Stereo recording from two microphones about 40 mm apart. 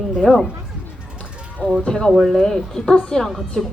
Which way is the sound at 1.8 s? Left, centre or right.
Left.